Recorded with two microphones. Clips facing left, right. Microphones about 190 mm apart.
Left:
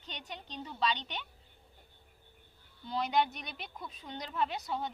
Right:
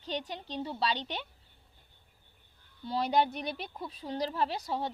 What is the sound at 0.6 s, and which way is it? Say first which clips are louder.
Speech: right 1 dB; 35° right (ahead or behind).